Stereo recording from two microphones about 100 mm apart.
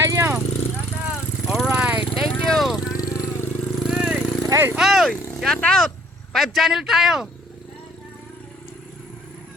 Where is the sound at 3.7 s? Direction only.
5° right (ahead or behind).